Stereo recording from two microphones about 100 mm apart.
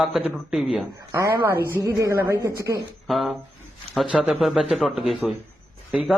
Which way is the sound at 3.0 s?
Centre (ahead or behind).